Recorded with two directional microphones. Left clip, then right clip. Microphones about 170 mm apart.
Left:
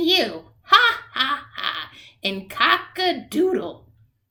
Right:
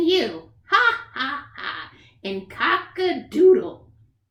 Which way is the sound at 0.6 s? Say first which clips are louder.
Left 3 dB; 20° left (ahead or behind).